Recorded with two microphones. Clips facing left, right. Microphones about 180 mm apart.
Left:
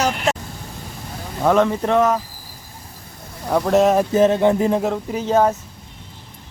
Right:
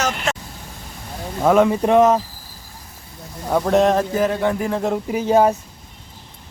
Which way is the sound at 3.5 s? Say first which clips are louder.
Left 1 dB; centre (ahead or behind).